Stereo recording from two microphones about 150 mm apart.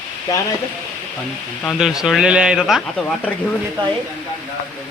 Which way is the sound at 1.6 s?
5° right (ahead or behind).